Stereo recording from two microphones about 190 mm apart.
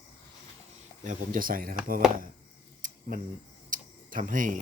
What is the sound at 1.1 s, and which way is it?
Speech, 45° right (ahead or behind).